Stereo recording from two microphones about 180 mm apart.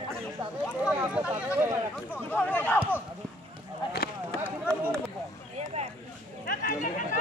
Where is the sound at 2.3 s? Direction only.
10° left (ahead or behind).